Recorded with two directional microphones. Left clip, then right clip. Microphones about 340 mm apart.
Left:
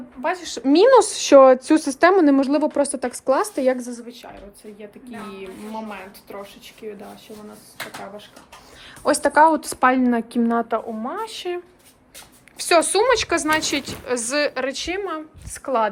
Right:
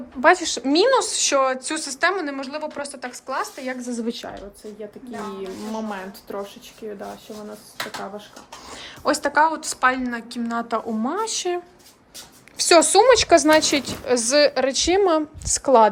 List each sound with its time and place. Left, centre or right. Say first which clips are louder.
0.4 s speech: left 3 dB; centre
4.0 s a woman's voice: right 9 dB; right
5.9 s a woman's voice: right 4 dB; centre
9.0 s a woman's voice: left 4 dB; centre
9.6 s a woman's voice: left 2 dB; centre